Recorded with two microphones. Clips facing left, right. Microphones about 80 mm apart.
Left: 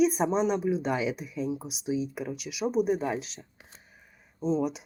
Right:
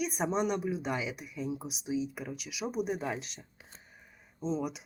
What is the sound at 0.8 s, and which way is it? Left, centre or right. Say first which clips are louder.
Speech: left 6 dB; centre.